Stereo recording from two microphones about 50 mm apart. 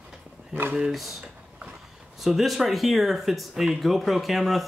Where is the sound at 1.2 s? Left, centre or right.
Centre.